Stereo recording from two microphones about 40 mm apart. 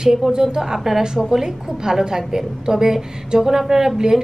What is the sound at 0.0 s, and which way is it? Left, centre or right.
A woman's voice, centre.